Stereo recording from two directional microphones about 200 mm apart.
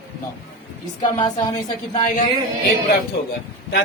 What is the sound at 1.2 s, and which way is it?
Speech, 20° left (ahead or behind).